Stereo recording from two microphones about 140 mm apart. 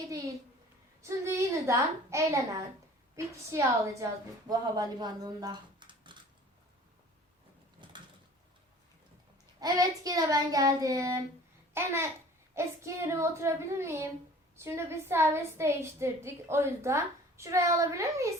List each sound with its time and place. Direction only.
0.1 s a woman's voice: 25° right (ahead or behind)
9.6 s a woman's voice: 25° right (ahead or behind)